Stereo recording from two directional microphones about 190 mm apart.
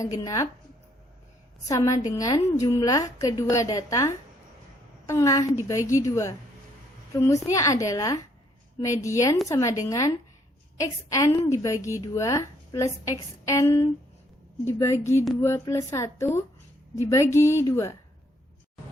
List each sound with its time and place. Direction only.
0.0 s a woman's voice: 15° left (ahead or behind)
1.6 s a woman's voice: 15° left (ahead or behind)